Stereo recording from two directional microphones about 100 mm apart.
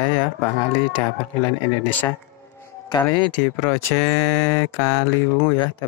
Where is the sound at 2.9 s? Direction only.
45° left (ahead or behind).